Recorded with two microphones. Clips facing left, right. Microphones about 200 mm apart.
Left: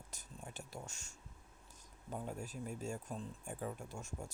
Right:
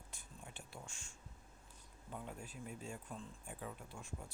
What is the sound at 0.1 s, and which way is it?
Whispering, 40° left (ahead or behind).